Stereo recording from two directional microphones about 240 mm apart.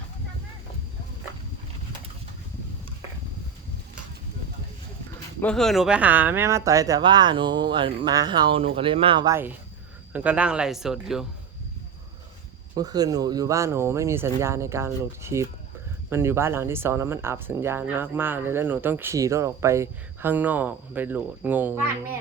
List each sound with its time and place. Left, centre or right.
5.4 s speech: centre
12.7 s speech: centre